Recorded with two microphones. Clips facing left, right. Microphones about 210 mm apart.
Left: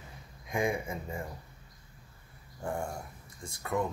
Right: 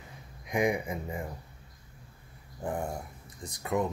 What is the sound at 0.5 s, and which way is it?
Speech, 20° right (ahead or behind).